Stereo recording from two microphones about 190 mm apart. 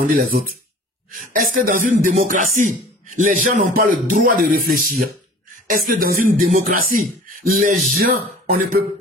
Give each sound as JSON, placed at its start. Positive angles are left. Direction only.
{"t": 0.0, "sound": "speech", "side_deg": -45}